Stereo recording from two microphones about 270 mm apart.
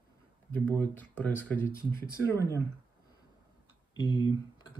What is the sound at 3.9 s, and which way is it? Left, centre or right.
Speech, centre.